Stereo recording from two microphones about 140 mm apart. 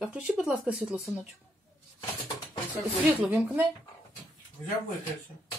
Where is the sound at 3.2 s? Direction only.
15° right (ahead or behind).